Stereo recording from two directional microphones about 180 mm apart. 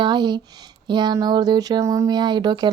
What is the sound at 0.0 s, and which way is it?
Speech, 25° right (ahead or behind).